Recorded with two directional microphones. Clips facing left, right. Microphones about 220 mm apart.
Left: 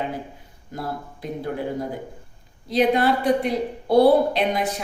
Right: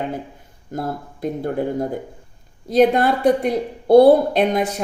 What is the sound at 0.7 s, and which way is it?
Speech, 50° right (ahead or behind).